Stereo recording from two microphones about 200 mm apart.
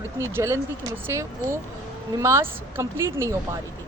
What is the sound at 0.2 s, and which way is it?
Speech, 15° right (ahead or behind).